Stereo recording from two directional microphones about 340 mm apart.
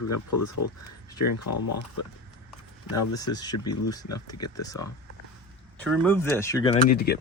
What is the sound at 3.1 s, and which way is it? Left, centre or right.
Speech, centre.